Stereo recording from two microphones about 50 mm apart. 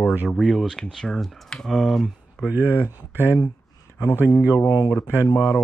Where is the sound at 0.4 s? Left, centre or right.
Centre.